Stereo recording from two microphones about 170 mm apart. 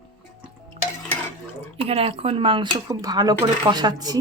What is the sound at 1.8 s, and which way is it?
Speech, 35° right (ahead or behind).